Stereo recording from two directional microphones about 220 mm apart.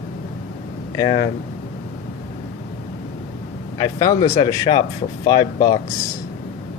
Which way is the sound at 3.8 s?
15° left (ahead or behind).